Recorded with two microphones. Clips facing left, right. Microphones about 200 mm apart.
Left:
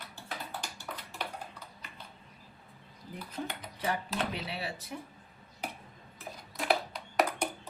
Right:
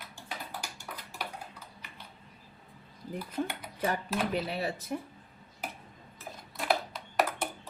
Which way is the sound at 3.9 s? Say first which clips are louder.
Right 2 dB; 45° right (ahead or behind).